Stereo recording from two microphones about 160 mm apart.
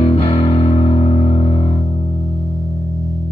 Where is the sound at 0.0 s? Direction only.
35° left (ahead or behind).